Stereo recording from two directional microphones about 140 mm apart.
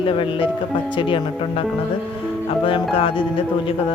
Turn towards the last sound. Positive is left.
turn(degrees=40)  # may be behind; listen again after turning